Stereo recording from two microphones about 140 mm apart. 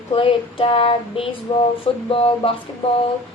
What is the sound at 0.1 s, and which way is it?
Speech, 40° left (ahead or behind).